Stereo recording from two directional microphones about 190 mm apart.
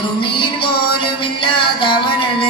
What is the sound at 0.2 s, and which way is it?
Music, 25° left (ahead or behind).